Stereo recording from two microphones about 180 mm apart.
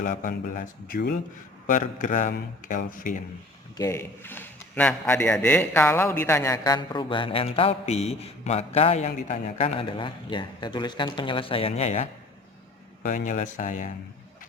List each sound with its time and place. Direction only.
0.0 s speech: 45° left (ahead or behind)
1.6 s speech: 45° left (ahead or behind)
3.8 s a man's voice: 15° left (ahead or behind); by 13.9 s 45° left (ahead or behind)